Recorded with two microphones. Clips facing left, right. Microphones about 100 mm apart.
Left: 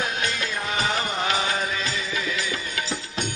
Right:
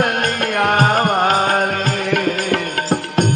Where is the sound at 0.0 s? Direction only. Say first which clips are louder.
Right 9 dB; 55° right (ahead or behind).